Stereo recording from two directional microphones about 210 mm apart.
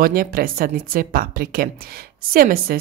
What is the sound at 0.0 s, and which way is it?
A woman's voice, 45° right (ahead or behind).